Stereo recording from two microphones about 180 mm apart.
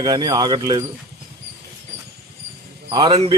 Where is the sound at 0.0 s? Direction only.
20° right (ahead or behind).